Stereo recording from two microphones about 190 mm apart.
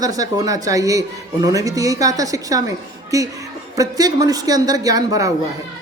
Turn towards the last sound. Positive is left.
turn(degrees=-20)  # may be behind; listen again after turning